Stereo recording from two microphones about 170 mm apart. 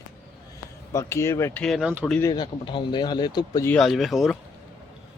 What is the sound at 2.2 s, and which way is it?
Speech, 25° left (ahead or behind).